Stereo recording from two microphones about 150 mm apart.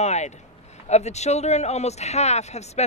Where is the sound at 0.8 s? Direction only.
50° left (ahead or behind).